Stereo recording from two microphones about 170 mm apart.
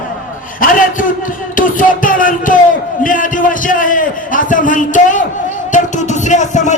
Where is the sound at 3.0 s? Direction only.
50° left (ahead or behind).